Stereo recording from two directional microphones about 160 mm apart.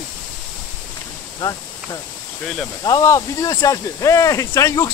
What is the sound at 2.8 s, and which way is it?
Speech, 20° left (ahead or behind).